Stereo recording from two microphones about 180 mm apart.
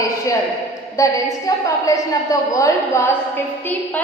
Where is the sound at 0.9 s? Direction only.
20° left (ahead or behind).